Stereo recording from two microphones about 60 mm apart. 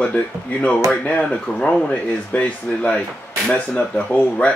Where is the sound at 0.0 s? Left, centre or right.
Left.